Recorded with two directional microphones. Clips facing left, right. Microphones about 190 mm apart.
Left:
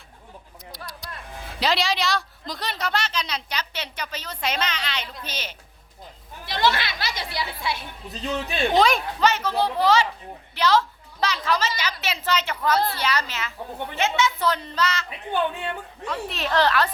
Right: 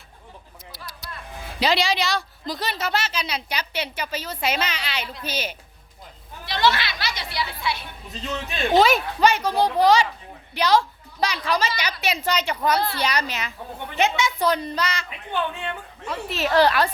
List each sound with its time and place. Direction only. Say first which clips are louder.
0.7 s a sound: left 2 dB; 5° right (ahead or behind)
1.5 s a woman's voice: right 2 dB; centre (ahead or behind)
6.4 s speech: right 1 dB; 50° left (ahead or behind)
8.7 s a woman's voice: right 3 dB; 5° right (ahead or behind)
16.0 s a woman's voice: right 3 dB; 5° right (ahead or behind)